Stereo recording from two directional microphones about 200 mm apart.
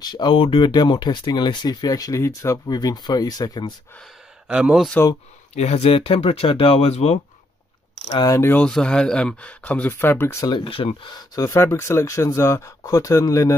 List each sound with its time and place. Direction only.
0.0 s speech: 20° left (ahead or behind)
4.5 s speech: 5° right (ahead or behind)
5.5 s speech: 35° left (ahead or behind)
8.1 s speech: 20° left (ahead or behind)